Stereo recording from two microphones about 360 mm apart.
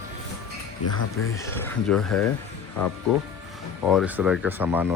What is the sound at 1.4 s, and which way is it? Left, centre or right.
Speech, centre.